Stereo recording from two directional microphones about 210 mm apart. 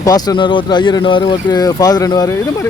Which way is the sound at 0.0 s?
15° left (ahead or behind).